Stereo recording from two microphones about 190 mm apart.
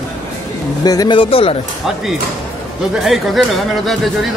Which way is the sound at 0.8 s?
20° left (ahead or behind).